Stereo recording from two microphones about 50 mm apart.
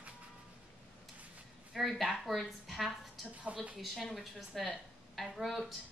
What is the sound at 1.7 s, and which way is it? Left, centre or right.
A woman's voice, centre.